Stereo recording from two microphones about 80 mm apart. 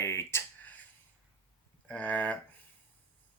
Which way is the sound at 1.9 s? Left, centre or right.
Centre.